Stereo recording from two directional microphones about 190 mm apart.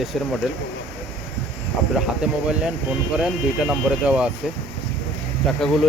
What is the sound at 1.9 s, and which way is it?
Speech, 5° right (ahead or behind).